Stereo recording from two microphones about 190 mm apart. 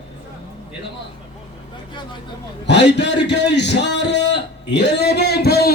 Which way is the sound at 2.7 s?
65° left (ahead or behind).